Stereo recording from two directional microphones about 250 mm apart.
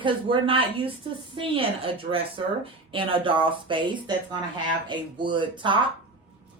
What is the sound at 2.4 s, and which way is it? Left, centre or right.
Speech, right.